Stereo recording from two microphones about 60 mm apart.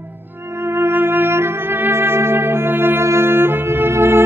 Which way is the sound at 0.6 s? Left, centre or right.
Right.